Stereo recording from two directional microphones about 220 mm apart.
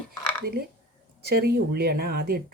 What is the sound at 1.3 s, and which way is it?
Speech, 45° right (ahead or behind).